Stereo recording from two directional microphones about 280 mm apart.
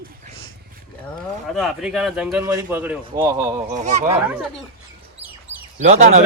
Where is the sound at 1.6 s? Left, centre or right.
Centre.